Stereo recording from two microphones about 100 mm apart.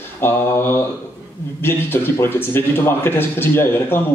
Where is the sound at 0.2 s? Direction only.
20° left (ahead or behind).